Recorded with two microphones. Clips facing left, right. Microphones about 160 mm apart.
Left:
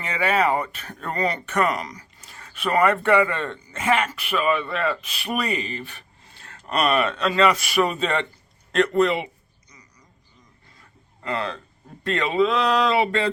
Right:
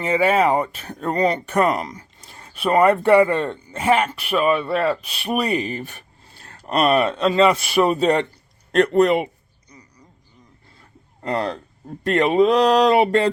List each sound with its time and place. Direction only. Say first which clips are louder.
0.4 s speech: right 4 dB; 25° right (ahead or behind); by 9.3 s 45° right (ahead or behind)
11.2 s speech: right 4 dB; 45° right (ahead or behind)